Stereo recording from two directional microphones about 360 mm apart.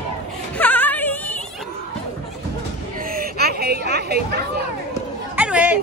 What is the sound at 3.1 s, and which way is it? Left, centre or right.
Chatter, right.